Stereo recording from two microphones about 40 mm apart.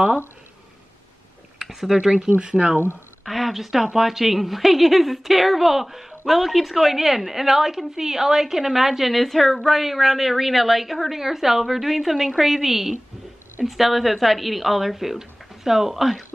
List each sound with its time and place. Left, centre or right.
1.6 s a sound: centre
1.9 s speech: centre
2.3 s speech: right
3.3 s speech: centre